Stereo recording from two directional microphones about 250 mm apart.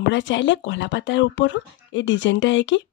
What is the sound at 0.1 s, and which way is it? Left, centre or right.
Speech, left.